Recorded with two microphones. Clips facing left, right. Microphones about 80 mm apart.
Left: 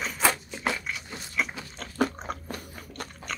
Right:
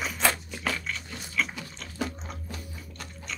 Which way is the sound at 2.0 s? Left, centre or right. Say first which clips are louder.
Left 7 dB; left.